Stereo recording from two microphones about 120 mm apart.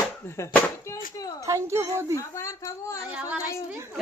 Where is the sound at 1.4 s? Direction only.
25° right (ahead or behind).